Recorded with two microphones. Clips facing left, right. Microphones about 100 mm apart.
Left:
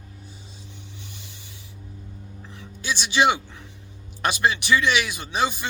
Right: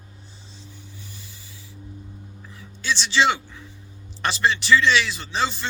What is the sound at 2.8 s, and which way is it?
Speech, 15° left (ahead or behind).